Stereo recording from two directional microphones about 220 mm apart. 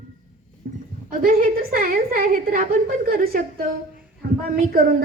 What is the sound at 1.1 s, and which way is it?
A woman's voice, 40° right (ahead or behind).